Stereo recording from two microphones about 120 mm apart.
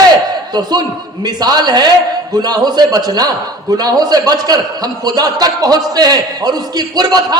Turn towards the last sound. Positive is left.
turn(degrees=-35)  # may be behind; listen again after turning